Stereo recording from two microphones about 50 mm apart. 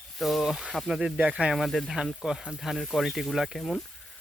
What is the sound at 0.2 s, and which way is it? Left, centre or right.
Speech, centre.